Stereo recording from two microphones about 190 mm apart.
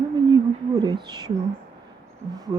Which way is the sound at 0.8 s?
25° right (ahead or behind).